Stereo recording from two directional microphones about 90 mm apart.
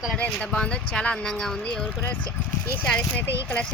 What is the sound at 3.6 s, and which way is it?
Speech, 10° left (ahead or behind).